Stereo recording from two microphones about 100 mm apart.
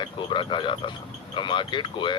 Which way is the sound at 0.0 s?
50° left (ahead or behind).